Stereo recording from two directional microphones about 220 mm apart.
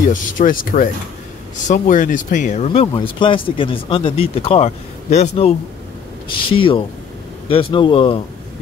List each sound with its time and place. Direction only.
0.1 s speech: 35° left (ahead or behind)